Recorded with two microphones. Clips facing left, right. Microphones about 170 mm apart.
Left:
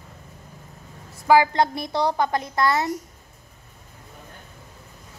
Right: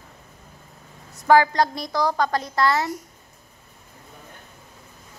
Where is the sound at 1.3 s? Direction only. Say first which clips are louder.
Right 1 dB; 10° left (ahead or behind).